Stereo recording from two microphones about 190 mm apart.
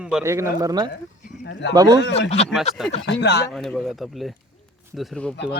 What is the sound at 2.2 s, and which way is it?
Speech, 35° left (ahead or behind).